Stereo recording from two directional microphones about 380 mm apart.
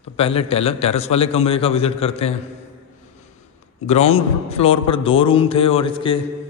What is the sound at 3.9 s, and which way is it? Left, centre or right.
A man's voice, centre.